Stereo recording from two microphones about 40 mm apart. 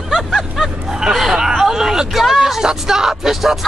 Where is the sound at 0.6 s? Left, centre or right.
Centre.